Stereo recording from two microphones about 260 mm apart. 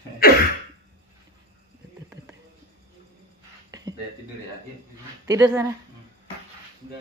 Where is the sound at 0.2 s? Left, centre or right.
Left.